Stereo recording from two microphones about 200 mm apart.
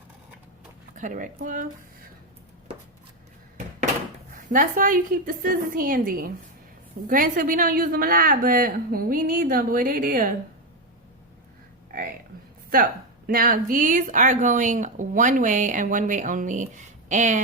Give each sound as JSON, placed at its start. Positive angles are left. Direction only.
{"t": 0.9, "sound": "speech", "side_deg": -40}
{"t": 4.4, "sound": "a woman's voice", "side_deg": -40}
{"t": 12.7, "sound": "speech", "side_deg": -45}